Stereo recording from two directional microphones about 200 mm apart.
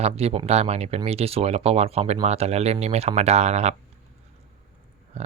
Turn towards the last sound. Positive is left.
turn(degrees=-30)  # may be behind; listen again after turning